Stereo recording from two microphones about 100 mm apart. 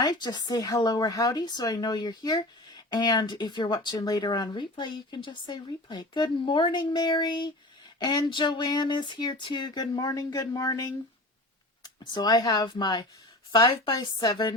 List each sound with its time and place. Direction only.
0.0 s speech: 45° left (ahead or behind)